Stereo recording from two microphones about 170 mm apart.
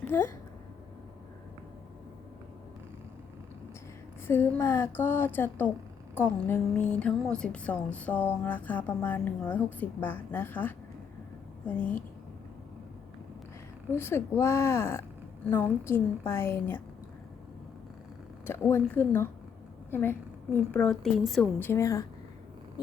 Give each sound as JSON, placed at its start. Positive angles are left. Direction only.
{"t": 4.3, "sound": "a woman's voice", "side_deg": 15}
{"t": 11.8, "sound": "a woman's voice", "side_deg": 10}
{"t": 13.9, "sound": "a woman's voice", "side_deg": 15}
{"t": 18.4, "sound": "a woman's voice", "side_deg": 10}
{"t": 21.6, "sound": "a woman's voice", "side_deg": 15}